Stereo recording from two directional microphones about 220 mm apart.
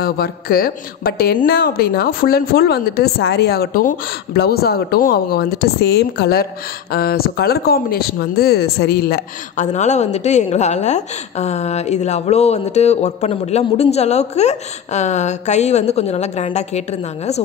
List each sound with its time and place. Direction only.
0.0 s a woman's voice: 45° left (ahead or behind)